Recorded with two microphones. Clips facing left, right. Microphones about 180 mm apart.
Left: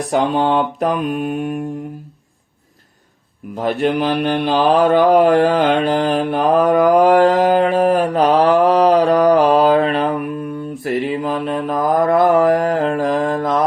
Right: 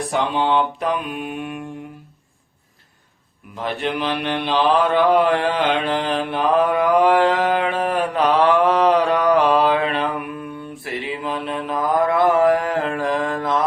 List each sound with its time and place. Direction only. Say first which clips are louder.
0.1 s mantra: left 4 dB; 45° left (ahead or behind)
3.5 s mantra: left 7 dB; 45° left (ahead or behind)